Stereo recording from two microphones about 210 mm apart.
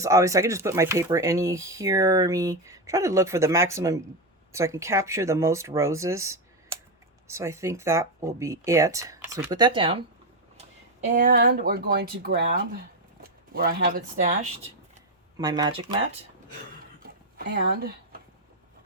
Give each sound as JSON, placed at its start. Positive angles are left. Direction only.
{"t": 0.0, "sound": "speech", "side_deg": -15}
{"t": 11.1, "sound": "speech", "side_deg": -40}
{"t": 15.4, "sound": "speech", "side_deg": -20}
{"t": 17.3, "sound": "speech", "side_deg": -50}